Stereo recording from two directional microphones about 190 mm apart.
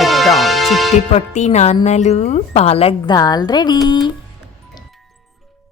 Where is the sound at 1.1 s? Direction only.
35° left (ahead or behind).